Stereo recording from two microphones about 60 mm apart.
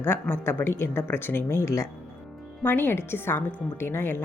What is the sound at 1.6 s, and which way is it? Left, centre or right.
Speech, left.